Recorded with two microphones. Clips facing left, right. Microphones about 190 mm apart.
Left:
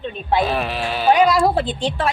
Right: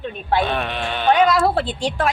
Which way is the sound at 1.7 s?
15° right (ahead or behind).